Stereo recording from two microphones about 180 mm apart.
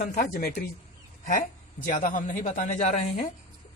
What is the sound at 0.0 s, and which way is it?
Speech, 50° left (ahead or behind).